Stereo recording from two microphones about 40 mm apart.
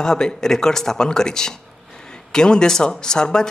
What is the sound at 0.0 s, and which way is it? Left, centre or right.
A man's voice, centre.